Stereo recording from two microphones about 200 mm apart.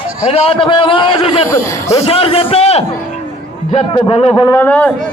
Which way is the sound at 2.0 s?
30° left (ahead or behind).